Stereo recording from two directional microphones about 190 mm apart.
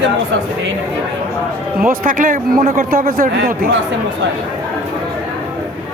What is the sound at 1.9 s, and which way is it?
A man's voice, 45° right (ahead or behind).